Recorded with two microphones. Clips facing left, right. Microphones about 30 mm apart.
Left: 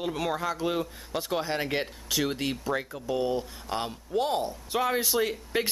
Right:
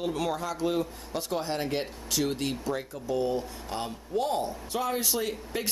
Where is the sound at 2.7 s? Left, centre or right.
Left.